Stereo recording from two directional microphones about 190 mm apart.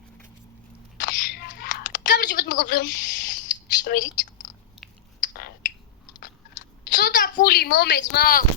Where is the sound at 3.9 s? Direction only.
55° left (ahead or behind).